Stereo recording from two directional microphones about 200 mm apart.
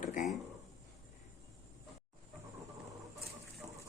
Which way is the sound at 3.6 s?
15° right (ahead or behind).